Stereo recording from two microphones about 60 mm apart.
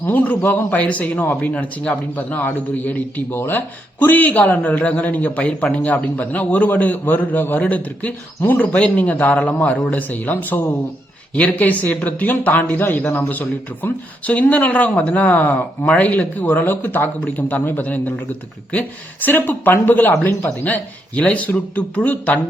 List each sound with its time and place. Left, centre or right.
0.0 s a man's voice: left
17.2 s a man's voice: left